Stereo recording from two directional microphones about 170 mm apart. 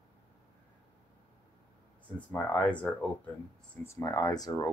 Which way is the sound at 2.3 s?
10° left (ahead or behind).